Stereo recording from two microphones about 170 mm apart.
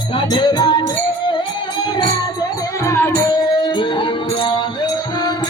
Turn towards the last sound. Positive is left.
turn(degrees=25)  # may be behind; listen again after turning